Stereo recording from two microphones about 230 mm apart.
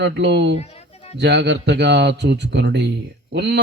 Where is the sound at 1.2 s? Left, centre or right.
Right.